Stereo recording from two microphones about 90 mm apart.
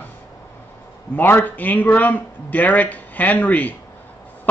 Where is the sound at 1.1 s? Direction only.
20° left (ahead or behind).